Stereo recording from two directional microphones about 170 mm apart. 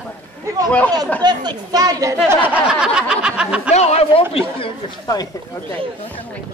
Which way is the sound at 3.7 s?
40° left (ahead or behind).